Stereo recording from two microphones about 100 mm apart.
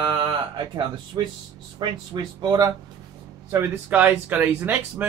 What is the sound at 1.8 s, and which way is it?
Speech, 50° right (ahead or behind).